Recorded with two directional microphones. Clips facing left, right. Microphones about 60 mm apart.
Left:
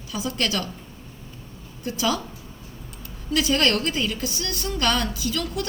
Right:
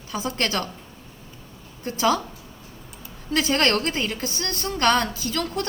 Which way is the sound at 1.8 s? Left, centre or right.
Right.